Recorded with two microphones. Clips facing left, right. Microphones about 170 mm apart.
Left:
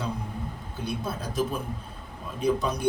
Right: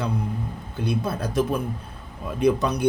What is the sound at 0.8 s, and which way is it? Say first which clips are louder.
A man's voice: right 6 dB; 70° right (ahead or behind).